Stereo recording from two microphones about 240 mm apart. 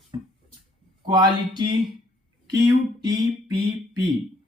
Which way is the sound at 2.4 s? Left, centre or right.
Centre.